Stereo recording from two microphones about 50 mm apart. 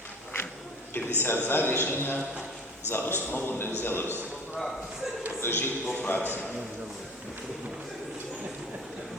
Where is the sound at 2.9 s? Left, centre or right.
Left.